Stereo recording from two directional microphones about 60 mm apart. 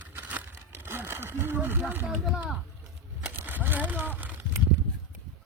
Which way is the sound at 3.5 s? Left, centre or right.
Right.